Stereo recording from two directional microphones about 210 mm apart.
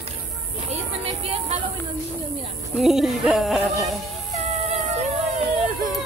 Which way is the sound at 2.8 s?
Centre (ahead or behind).